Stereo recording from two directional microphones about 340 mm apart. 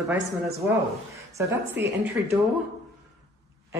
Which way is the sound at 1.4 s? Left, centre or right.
Centre.